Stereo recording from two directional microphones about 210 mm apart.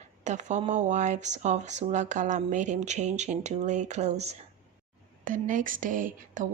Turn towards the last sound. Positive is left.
turn(degrees=-40)  # may be behind; listen again after turning